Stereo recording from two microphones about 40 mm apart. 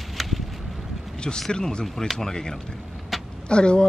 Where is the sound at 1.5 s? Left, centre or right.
Left.